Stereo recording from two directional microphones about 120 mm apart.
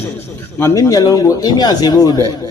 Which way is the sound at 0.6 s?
25° left (ahead or behind).